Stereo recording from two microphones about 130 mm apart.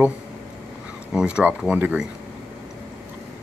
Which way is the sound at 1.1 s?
10° right (ahead or behind).